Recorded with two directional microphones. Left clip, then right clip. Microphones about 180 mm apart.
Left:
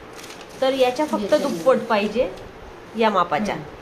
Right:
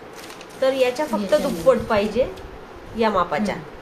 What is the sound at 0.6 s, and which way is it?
A woman's voice, 30° left (ahead or behind).